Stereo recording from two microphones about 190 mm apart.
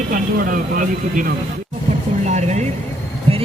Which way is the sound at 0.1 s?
45° right (ahead or behind).